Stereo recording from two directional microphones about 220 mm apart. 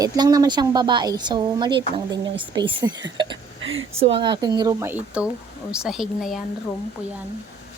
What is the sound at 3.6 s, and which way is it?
Speech, 65° right (ahead or behind).